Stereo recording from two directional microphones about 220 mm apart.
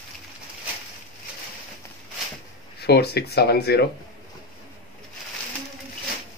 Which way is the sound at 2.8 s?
45° left (ahead or behind).